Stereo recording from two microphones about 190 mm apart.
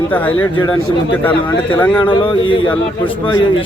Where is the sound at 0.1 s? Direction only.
10° left (ahead or behind).